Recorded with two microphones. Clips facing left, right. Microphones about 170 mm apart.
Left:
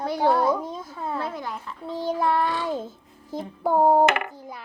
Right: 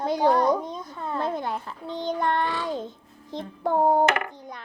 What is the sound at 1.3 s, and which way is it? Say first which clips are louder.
Speech: right 4 dB; 25° right (ahead or behind).